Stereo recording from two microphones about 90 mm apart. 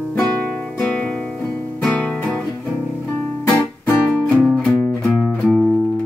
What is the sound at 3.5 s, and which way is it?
Music, 15° left (ahead or behind).